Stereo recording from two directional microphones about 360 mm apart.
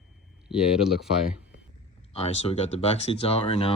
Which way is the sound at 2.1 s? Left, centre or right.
Centre.